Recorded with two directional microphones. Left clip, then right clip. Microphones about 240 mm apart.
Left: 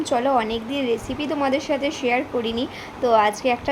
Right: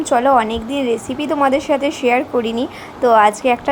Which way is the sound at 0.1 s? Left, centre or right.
Centre.